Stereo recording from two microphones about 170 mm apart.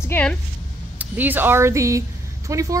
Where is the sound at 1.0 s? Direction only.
10° right (ahead or behind).